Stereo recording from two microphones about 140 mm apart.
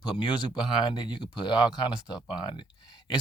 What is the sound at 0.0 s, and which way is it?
Speech, 35° left (ahead or behind).